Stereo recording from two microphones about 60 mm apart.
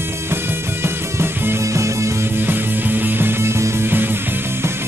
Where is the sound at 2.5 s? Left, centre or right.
Right.